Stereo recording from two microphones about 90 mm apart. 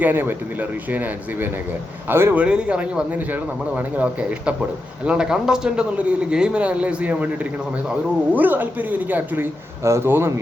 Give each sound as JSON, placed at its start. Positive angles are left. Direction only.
{"t": 0.0, "sound": "speech", "side_deg": -20}
{"t": 2.3, "sound": "speech", "side_deg": -10}